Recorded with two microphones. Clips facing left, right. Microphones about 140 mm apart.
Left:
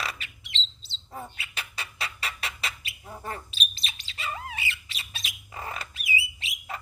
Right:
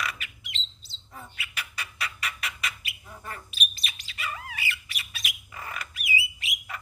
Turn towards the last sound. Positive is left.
turn(degrees=25)  # may be behind; listen again after turning